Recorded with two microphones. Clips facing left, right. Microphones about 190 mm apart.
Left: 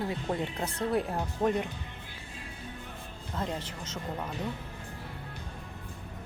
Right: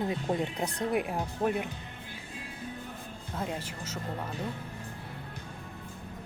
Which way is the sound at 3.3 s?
10° right (ahead or behind).